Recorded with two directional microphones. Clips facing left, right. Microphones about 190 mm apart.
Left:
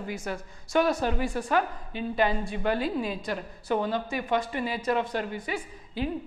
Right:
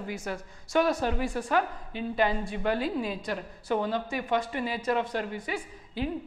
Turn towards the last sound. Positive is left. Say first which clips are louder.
# left 1 dB
turn(degrees=15)  # may be behind; listen again after turning